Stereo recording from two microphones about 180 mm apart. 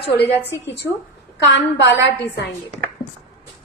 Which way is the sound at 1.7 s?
75° left (ahead or behind).